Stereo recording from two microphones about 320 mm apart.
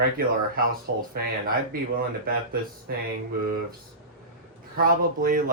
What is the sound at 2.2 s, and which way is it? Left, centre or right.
Speech, right.